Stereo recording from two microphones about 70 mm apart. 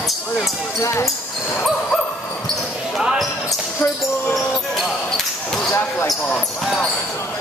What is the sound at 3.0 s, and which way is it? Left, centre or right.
Basketball bounce, centre.